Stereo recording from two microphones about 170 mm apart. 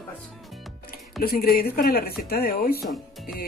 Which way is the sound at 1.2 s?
60° left (ahead or behind).